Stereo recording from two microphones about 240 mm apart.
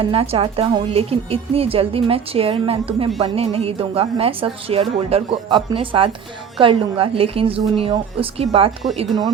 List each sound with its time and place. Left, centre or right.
0.0 s a woman's voice: right